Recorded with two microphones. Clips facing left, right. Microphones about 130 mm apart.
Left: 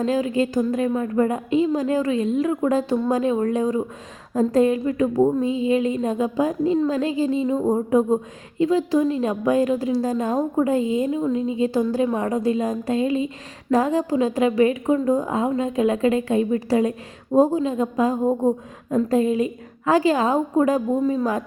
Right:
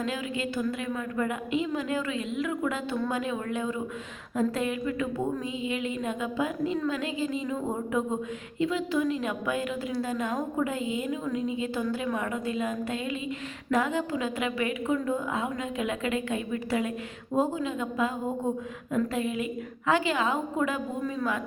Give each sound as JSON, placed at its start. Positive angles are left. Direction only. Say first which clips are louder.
{"t": 0.0, "sound": "a woman's voice", "louder": "left 10 dB", "side_deg": 35}